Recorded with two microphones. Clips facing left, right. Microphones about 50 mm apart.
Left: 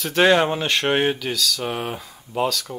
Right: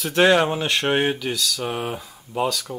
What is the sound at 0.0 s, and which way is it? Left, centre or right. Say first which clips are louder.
Speech: even; centre.